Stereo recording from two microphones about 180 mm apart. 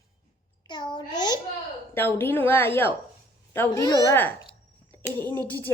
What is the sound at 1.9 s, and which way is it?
A child's voice, 10° left (ahead or behind).